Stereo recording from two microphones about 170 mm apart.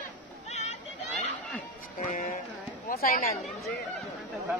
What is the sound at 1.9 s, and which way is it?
Music, 50° left (ahead or behind).